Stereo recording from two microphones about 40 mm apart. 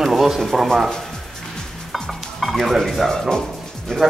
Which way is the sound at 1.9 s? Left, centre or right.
Centre.